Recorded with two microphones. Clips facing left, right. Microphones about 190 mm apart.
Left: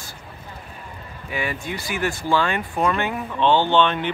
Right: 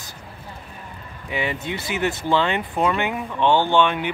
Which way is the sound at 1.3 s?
20° right (ahead or behind).